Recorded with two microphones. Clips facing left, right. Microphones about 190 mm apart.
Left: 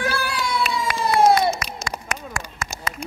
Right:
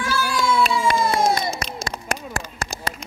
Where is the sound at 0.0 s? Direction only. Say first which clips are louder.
Right 1 dB; 60° left (ahead or behind).